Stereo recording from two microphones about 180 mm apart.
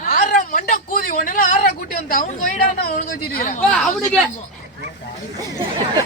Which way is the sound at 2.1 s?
45° left (ahead or behind).